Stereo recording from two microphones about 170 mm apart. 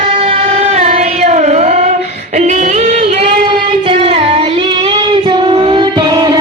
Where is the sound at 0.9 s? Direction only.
45° right (ahead or behind); by 6.3 s 25° right (ahead or behind).